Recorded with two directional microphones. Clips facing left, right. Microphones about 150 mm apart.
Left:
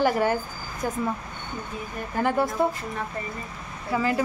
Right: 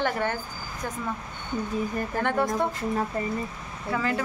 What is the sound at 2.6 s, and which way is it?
Speech, 5° left (ahead or behind).